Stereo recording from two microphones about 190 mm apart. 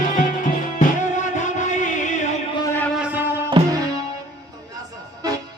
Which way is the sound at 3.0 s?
10° right (ahead or behind).